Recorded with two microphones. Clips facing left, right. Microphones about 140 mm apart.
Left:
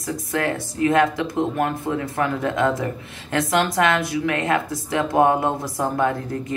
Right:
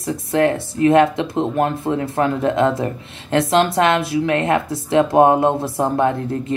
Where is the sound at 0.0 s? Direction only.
25° right (ahead or behind).